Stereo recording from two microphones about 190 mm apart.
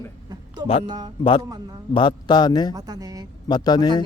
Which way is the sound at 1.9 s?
25° left (ahead or behind).